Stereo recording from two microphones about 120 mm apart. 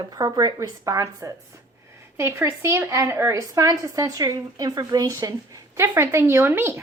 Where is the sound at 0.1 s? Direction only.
30° right (ahead or behind).